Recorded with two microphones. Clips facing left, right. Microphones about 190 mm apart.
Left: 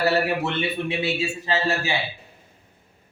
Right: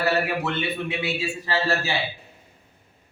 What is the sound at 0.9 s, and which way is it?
A man's voice, 25° left (ahead or behind).